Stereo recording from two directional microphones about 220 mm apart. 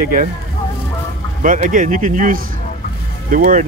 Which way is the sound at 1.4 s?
35° right (ahead or behind).